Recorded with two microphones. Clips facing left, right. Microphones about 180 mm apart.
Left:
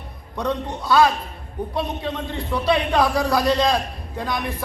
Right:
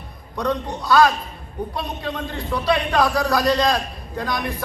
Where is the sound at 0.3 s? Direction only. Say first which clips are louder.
Right 1 dB; 25° left (ahead or behind).